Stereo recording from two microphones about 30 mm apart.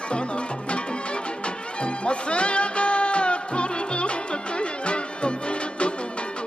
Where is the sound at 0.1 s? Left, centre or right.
Left.